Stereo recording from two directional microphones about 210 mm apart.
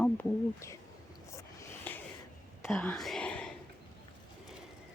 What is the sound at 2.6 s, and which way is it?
Whispering, centre (ahead or behind).